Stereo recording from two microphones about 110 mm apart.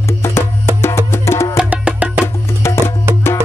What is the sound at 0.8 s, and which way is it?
Music, 20° left (ahead or behind).